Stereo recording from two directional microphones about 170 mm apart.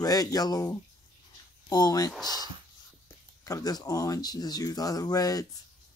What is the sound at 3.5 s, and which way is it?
Speech, 20° left (ahead or behind).